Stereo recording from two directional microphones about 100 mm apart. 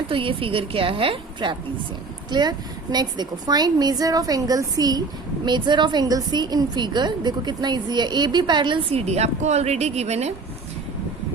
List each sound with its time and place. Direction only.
0.1 s a woman's voice: 60° right (ahead or behind)
2.3 s a woman's voice: 45° right (ahead or behind)
8.9 s a woman's voice: 90° right